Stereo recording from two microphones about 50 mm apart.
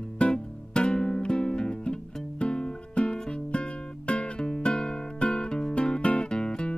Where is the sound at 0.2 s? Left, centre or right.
Centre.